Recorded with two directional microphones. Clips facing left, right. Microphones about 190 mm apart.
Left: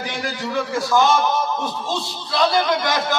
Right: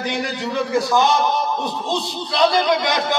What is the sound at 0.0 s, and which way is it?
A man's voice, 20° right (ahead or behind).